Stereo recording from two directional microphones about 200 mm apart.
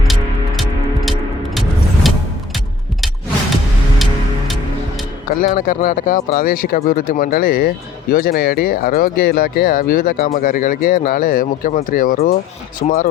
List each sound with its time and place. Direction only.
2.0 s music: centre (ahead or behind)
3.9 s music: centre (ahead or behind)
5.4 s speech: 45° left (ahead or behind)